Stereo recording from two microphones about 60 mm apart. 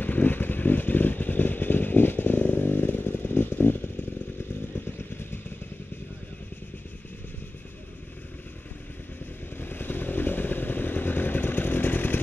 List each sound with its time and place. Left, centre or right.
0.0 s vehicle: left
4.7 s motorcycle: left
9.6 s motorcycle: left